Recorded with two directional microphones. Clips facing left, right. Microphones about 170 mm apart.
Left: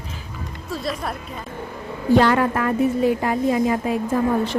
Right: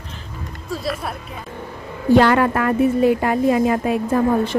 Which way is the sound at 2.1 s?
70° right (ahead or behind).